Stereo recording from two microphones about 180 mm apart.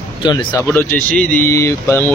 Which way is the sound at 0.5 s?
10° left (ahead or behind).